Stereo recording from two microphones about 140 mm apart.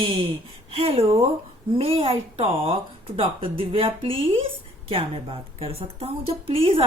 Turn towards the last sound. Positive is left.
turn(degrees=-40)  # may be behind; listen again after turning